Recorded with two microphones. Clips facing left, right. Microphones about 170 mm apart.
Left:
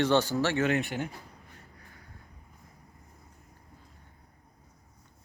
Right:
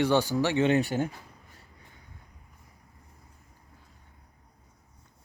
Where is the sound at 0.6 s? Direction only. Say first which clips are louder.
Right 4 dB; 35° right (ahead or behind).